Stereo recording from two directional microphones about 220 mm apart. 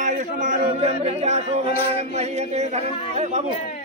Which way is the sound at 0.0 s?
30° right (ahead or behind).